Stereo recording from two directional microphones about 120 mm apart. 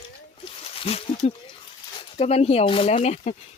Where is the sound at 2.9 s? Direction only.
70° left (ahead or behind).